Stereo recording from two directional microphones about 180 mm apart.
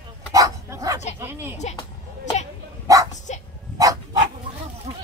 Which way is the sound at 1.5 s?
40° left (ahead or behind).